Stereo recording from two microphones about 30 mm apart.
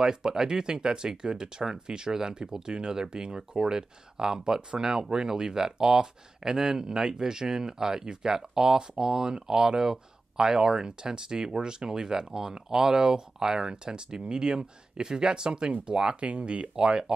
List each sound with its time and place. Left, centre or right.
0.0 s speech: right
16.2 s speech: right